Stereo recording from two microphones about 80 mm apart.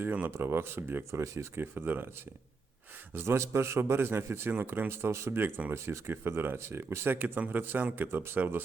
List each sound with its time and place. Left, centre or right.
0.0 s speech: centre
0.3 s speech: right
1.2 s a man's voice: right
1.5 s speech: right
3.2 s a man's voice: right
5.7 s speech: right